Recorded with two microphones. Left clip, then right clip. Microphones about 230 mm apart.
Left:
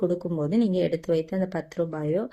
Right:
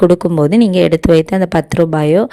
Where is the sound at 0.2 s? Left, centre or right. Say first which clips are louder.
Right 14 dB; right.